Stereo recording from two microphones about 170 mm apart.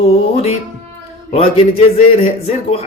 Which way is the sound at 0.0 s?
35° left (ahead or behind).